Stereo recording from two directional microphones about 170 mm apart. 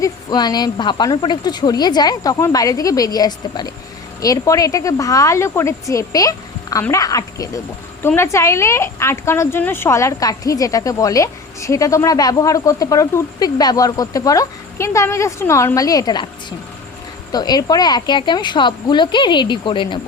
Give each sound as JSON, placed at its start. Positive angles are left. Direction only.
{"t": 0.0, "sound": "speech", "side_deg": 25}